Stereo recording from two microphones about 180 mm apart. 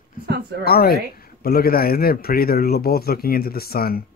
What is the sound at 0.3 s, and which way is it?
Speech, 65° right (ahead or behind).